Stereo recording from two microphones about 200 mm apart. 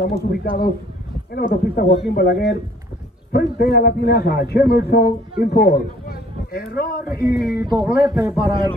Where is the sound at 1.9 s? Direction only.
50° left (ahead or behind).